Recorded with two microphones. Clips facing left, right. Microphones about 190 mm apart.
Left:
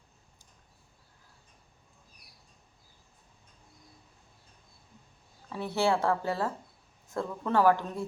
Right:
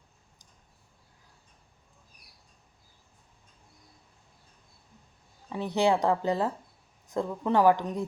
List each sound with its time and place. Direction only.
5.5 s speech: 15° right (ahead or behind)